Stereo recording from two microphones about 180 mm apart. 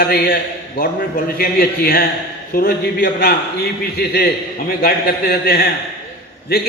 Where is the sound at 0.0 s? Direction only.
55° left (ahead or behind).